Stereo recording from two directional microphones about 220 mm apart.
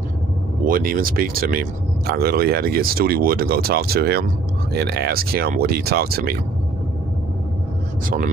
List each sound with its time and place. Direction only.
0.7 s speech: 40° right (ahead or behind)